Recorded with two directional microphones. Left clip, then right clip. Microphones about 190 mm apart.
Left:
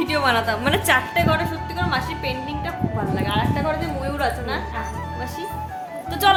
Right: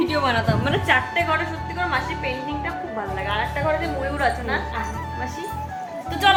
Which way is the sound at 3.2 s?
15° left (ahead or behind).